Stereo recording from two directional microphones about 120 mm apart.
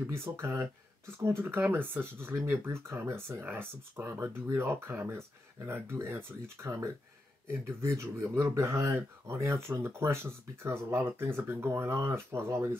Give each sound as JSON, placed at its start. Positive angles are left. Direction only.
{"t": 0.0, "sound": "speech", "side_deg": -20}